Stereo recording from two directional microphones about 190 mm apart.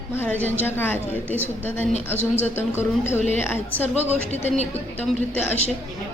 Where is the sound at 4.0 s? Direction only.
35° left (ahead or behind).